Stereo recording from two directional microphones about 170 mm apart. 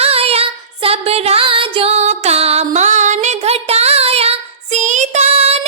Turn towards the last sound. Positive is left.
turn(degrees=-40)  # may be behind; listen again after turning